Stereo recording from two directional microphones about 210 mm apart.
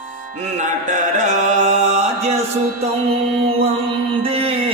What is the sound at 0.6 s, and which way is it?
Music, 35° right (ahead or behind).